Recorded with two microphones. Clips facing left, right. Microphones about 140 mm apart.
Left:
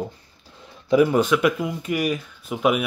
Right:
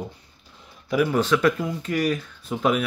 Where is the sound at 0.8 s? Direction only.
20° left (ahead or behind).